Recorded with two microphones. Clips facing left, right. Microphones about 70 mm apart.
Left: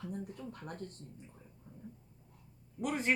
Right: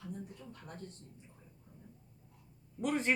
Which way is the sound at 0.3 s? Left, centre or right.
Left.